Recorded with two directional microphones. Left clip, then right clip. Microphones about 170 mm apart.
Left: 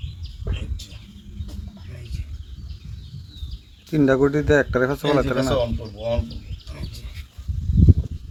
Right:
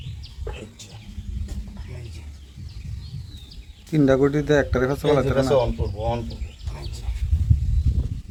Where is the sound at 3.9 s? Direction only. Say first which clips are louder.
Even; 20° left (ahead or behind).